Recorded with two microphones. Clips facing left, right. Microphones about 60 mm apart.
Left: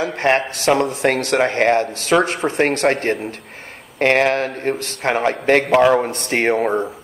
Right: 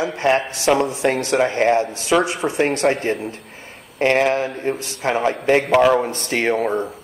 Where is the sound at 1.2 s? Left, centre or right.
Left.